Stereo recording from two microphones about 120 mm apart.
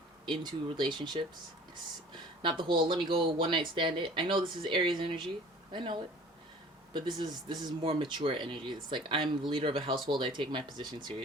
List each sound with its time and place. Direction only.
0.3 s speech: 40° right (ahead or behind)
2.4 s speech: 45° right (ahead or behind)